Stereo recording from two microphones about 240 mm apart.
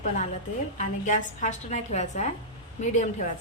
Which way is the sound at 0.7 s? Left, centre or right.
Left.